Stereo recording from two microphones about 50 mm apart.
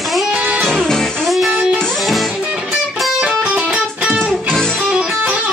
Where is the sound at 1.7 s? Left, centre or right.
Centre.